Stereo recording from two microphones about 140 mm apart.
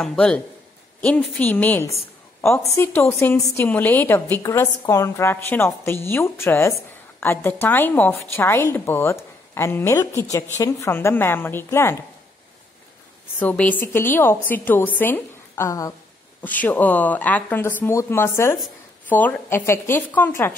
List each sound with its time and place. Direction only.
0.0 s a woman's voice: 5° left (ahead or behind)
13.4 s a woman's voice: 10° left (ahead or behind)